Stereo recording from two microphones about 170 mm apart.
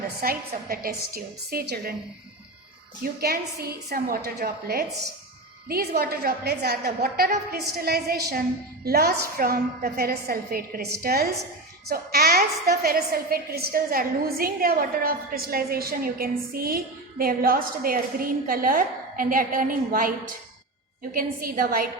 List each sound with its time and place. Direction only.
0.2 s a woman's voice: 60° right (ahead or behind)
3.0 s a woman's voice: 65° right (ahead or behind)